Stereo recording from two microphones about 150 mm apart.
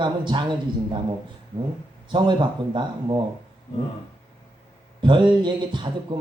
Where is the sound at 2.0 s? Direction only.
30° right (ahead or behind).